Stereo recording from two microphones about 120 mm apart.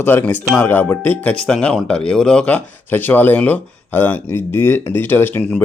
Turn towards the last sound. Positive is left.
turn(degrees=15)  # may be behind; listen again after turning